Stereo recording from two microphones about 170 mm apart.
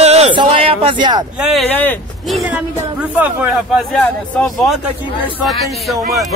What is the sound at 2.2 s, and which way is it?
Speech, centre (ahead or behind).